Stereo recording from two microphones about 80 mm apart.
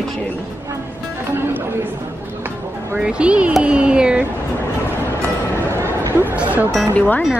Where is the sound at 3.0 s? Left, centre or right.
Centre.